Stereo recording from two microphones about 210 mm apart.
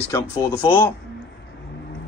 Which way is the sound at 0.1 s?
15° left (ahead or behind).